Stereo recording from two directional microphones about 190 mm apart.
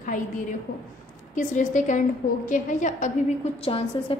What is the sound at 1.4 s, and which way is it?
A woman's voice, 40° left (ahead or behind).